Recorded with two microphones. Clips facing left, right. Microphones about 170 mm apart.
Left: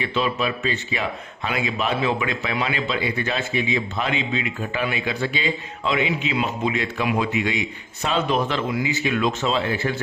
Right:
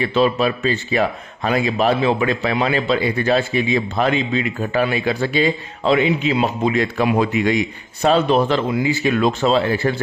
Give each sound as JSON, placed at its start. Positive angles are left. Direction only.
{"t": 0.0, "sound": "speech", "side_deg": -40}